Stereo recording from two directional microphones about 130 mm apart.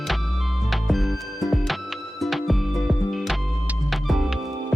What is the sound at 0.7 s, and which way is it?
Music, centre (ahead or behind).